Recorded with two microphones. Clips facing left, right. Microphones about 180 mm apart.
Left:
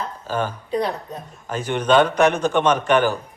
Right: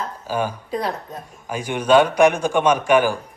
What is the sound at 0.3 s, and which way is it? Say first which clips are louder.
Speech: even; 10° right (ahead or behind).